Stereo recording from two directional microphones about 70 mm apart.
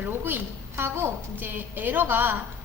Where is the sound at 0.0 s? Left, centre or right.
Right.